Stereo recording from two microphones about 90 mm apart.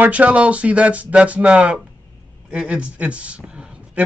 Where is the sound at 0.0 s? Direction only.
15° right (ahead or behind).